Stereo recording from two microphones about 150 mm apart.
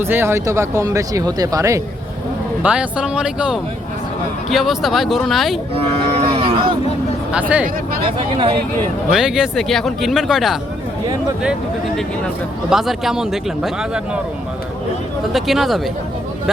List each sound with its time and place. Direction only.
0.0 s speech: 15° right (ahead or behind)
2.6 s speech: 5° right (ahead or behind)
5.7 s cattle: 40° right (ahead or behind)
7.3 s speech: 10° right (ahead or behind)
8.0 s speech: 35° right (ahead or behind)
9.0 s speech: 5° right (ahead or behind)
12.7 s speech: centre (ahead or behind)
15.3 s speech: centre (ahead or behind)